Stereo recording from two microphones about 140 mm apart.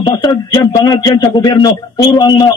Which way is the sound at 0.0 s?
30° left (ahead or behind).